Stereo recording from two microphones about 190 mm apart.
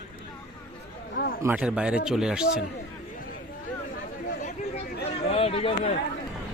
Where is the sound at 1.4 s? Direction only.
5° right (ahead or behind).